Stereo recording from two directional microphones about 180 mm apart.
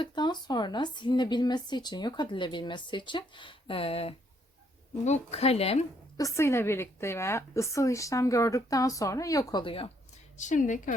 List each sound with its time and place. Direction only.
0.0 s speech: 25° left (ahead or behind)
6.1 s a woman's voice: 15° left (ahead or behind)
10.3 s a woman's voice: 45° left (ahead or behind)